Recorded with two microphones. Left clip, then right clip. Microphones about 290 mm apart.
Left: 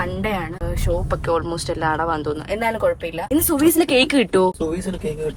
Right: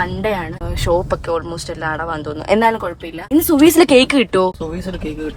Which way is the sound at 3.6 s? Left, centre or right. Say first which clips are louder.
Right 7 dB; right.